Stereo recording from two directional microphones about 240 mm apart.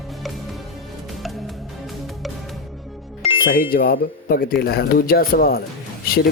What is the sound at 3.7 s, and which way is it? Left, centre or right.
Speech, left.